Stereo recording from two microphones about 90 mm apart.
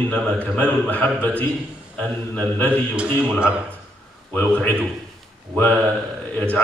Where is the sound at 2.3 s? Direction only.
15° left (ahead or behind).